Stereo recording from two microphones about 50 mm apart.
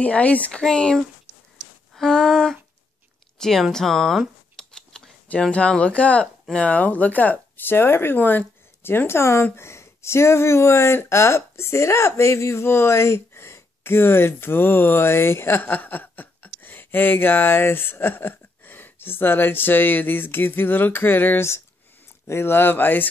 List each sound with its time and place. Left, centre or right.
0.0 s speech: left
0.5 s speech: centre
2.0 s a sound: centre
3.3 s speech: centre
4.6 s scissors: centre
5.5 s speech: left
7.7 s speech: left
8.2 s speech: left
8.8 s speech: left
15.6 s speech: left
21.4 s speech: left